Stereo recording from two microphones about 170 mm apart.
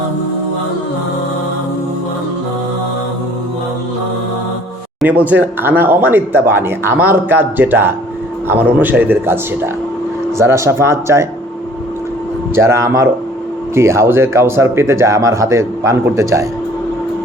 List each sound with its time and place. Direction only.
4.9 s speech: 10° right (ahead or behind)
12.5 s speech: 15° right (ahead or behind)